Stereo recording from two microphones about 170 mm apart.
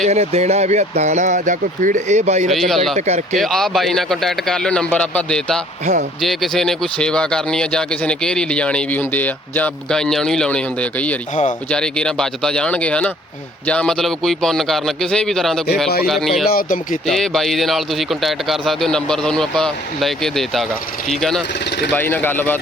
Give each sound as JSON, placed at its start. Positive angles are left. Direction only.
{"t": 0.0, "sound": "speech", "side_deg": -40}
{"t": 2.5, "sound": "speech", "side_deg": 0}
{"t": 2.9, "sound": "speech", "side_deg": -40}
{"t": 3.3, "sound": "speech", "side_deg": 0}
{"t": 5.8, "sound": "speech", "side_deg": -45}
{"t": 6.2, "sound": "speech", "side_deg": 0}
{"t": 16.5, "sound": "speech", "side_deg": 55}
{"t": 17.1, "sound": "speech", "side_deg": 0}